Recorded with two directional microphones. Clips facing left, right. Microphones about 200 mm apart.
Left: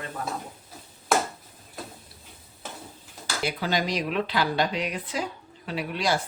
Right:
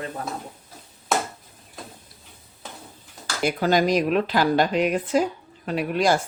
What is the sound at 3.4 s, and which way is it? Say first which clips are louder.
Speech: right 7 dB; 50° right (ahead or behind).